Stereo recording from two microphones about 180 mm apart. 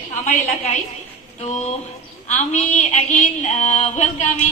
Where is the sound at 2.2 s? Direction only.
40° left (ahead or behind).